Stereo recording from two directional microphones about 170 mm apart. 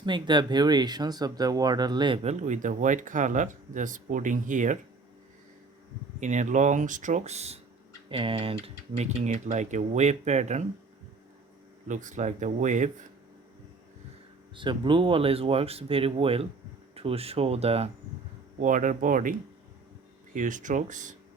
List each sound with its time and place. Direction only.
0.0 s speech: 25° right (ahead or behind)
2.2 s speech: 45° right (ahead or behind)
6.1 s speech: 45° right (ahead or behind)
11.9 s speech: 45° right (ahead or behind)
14.5 s speech: 30° right (ahead or behind)
18.6 s speech: 50° right (ahead or behind)